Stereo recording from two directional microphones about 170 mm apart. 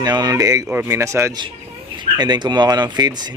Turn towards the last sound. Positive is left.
turn(degrees=-25)  # may be behind; listen again after turning